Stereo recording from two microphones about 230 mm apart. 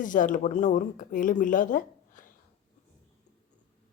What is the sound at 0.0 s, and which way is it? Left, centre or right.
Speech, left.